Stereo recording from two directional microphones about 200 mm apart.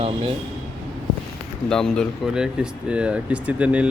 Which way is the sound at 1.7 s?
5° left (ahead or behind).